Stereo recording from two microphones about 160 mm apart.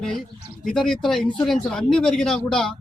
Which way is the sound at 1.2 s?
30° left (ahead or behind).